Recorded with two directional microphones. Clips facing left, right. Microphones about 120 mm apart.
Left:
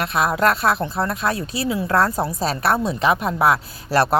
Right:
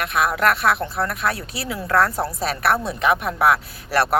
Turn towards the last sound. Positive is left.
turn(degrees=30)  # may be behind; listen again after turning